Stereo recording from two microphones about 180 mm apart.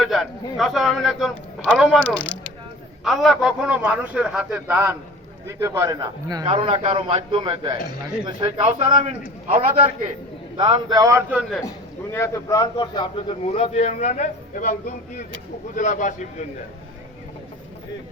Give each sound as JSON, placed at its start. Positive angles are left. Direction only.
{"t": 0.0, "sound": "a man's voice", "side_deg": 0}
{"t": 6.5, "sound": "a man's voice", "side_deg": -35}
{"t": 10.6, "sound": "a man's voice", "side_deg": -25}
{"t": 11.3, "sound": "a man's voice", "side_deg": -5}
{"t": 12.1, "sound": "a man's voice", "side_deg": 15}